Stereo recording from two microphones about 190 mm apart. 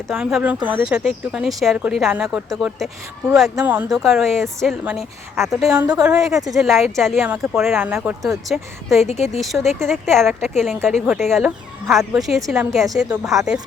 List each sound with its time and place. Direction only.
0.1 s speech: centre (ahead or behind)
9.0 s a woman's voice: 35° left (ahead or behind)
9.4 s speech: centre (ahead or behind)